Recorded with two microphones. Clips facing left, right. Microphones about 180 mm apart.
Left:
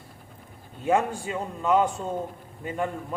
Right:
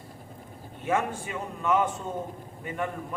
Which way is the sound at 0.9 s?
30° left (ahead or behind).